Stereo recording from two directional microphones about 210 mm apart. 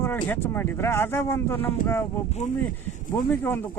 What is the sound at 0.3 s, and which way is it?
Speech, 10° left (ahead or behind).